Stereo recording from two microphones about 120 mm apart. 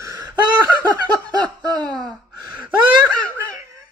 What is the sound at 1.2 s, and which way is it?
Snicker, 35° right (ahead or behind).